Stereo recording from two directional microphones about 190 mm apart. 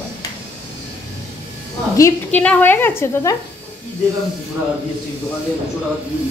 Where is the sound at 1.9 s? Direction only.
10° left (ahead or behind).